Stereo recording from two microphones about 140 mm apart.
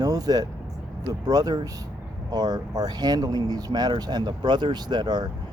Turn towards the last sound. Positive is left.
turn(degrees=-30)  # may be behind; listen again after turning